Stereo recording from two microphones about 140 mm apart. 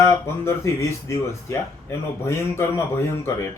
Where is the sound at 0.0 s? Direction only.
20° left (ahead or behind).